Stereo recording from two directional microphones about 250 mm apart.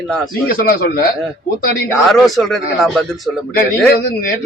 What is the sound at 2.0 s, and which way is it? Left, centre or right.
Speech, centre.